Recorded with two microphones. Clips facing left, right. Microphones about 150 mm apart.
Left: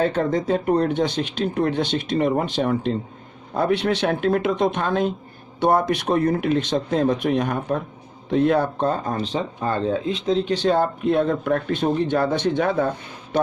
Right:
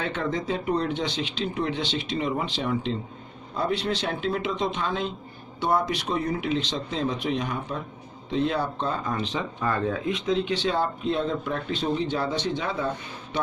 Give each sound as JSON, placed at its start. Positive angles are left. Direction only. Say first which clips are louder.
{"t": 0.0, "sound": "speech", "louder": "left 7 dB", "side_deg": 45}
{"t": 3.5, "sound": "speech", "louder": "left 6 dB", "side_deg": 60}